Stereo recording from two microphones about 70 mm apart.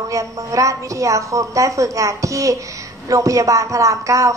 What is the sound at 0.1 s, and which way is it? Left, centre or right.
A woman's voice, right.